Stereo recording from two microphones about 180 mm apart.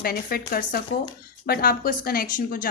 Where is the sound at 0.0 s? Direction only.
55° left (ahead or behind).